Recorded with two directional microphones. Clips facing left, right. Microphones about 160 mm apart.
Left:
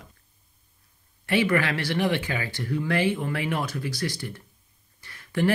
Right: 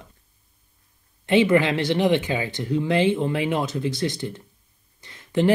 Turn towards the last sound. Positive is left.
turn(degrees=-20)  # may be behind; listen again after turning